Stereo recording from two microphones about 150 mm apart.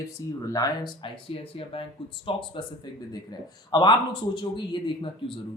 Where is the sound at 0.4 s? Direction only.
25° left (ahead or behind).